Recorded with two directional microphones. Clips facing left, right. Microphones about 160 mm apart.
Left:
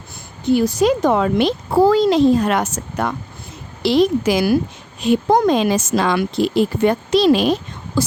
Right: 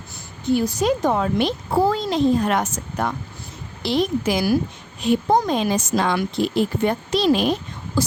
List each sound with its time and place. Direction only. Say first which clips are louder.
0.5 s speech: left 4 dB; 85° left